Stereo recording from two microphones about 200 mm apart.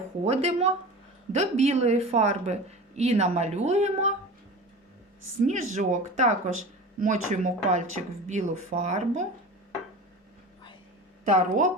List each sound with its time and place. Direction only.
0.3 s speech: 30° right (ahead or behind)
5.7 s speech: 35° right (ahead or behind)
11.3 s speech: 40° right (ahead or behind)